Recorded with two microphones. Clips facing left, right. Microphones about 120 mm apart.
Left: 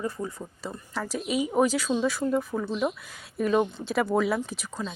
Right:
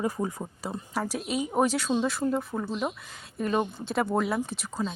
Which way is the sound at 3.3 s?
Centre (ahead or behind).